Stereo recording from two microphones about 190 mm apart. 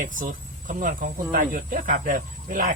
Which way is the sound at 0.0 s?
45° right (ahead or behind).